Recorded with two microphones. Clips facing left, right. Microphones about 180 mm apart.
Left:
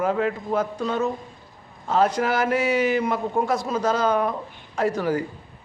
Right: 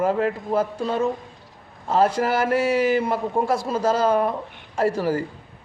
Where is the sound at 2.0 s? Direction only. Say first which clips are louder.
Right 1 dB; 30° right (ahead or behind).